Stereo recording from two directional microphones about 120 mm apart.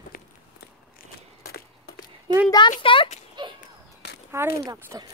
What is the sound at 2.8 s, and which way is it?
Speech, 45° left (ahead or behind).